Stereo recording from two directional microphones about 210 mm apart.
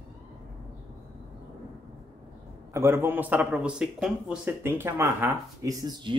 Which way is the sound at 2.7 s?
10° right (ahead or behind).